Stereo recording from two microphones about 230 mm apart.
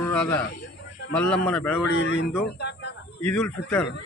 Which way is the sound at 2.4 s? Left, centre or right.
Left.